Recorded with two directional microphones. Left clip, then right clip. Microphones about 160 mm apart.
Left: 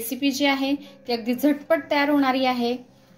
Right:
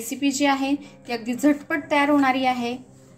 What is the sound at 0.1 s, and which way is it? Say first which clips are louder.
A woman's voice: right 1 dB; 20° left (ahead or behind).